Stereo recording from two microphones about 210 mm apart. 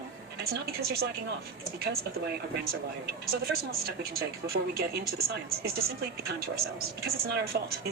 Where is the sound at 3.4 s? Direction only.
45° right (ahead or behind).